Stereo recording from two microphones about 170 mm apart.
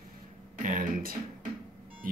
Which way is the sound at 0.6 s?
50° right (ahead or behind).